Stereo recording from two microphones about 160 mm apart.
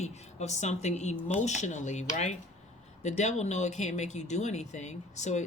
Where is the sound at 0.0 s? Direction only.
45° left (ahead or behind).